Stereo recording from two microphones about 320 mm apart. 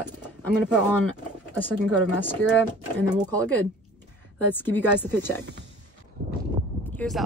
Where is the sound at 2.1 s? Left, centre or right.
Centre.